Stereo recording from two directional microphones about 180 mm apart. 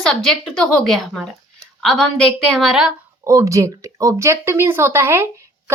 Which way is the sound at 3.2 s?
15° right (ahead or behind).